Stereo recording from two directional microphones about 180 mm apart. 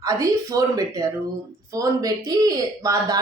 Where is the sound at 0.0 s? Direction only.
20° right (ahead or behind).